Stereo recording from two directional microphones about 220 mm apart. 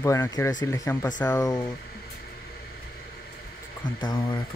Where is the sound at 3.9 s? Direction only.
20° left (ahead or behind).